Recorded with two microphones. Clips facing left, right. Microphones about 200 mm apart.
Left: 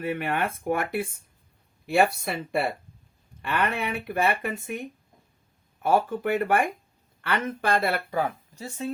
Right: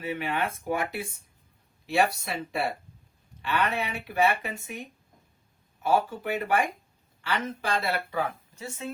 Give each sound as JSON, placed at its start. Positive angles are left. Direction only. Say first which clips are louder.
{"t": 0.0, "sound": "speech", "louder": "left 2 dB", "side_deg": 55}
{"t": 8.5, "sound": "speech", "louder": "left 4 dB", "side_deg": 35}